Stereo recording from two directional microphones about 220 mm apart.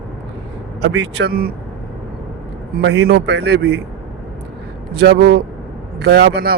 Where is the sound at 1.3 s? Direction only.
40° right (ahead or behind).